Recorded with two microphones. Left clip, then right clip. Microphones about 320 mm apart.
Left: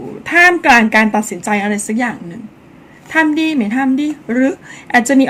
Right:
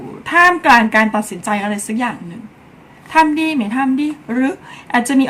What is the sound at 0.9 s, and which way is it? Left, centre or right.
Speech, right.